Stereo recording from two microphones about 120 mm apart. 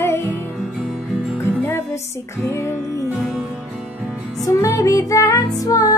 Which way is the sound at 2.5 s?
25° left (ahead or behind).